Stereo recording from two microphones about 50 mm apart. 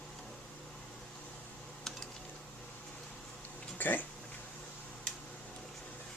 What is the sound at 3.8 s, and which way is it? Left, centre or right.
Speech, left.